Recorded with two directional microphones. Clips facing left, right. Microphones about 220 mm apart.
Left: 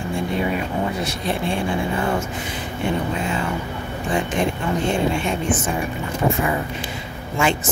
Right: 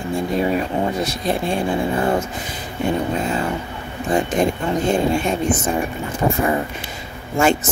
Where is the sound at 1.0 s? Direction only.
40° right (ahead or behind).